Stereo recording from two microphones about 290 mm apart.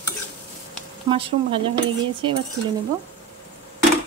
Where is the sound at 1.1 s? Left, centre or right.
Centre.